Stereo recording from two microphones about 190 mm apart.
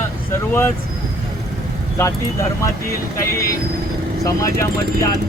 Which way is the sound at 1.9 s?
15° left (ahead or behind).